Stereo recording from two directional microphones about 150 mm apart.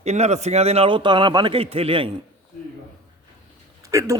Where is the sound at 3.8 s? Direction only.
20° right (ahead or behind).